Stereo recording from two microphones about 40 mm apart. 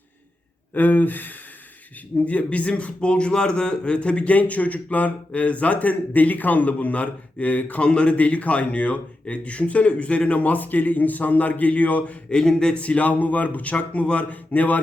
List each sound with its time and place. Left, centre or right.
0.7 s speech: left
2.1 s speech: left
4.4 s speech: left
7.9 s speech: left
8.1 s speech: left
12.4 s speech: centre
12.7 s speech: left